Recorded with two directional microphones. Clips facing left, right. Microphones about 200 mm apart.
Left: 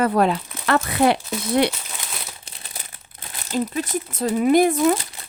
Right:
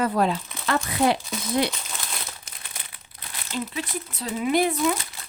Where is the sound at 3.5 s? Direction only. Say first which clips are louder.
Left 7 dB; 45° left (ahead or behind).